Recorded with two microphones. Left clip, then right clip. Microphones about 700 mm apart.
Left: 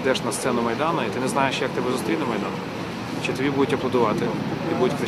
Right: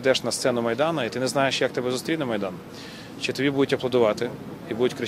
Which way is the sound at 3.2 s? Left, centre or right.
Right.